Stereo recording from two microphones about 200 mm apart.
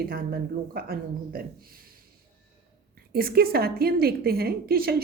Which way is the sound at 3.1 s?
50° right (ahead or behind).